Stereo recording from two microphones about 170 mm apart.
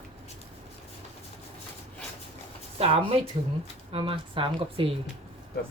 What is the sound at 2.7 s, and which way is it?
Speech, 35° right (ahead or behind).